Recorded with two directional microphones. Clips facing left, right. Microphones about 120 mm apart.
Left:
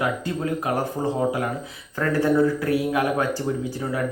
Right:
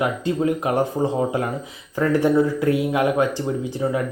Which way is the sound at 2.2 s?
20° right (ahead or behind).